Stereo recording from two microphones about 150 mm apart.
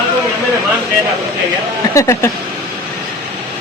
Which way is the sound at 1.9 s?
20° left (ahead or behind).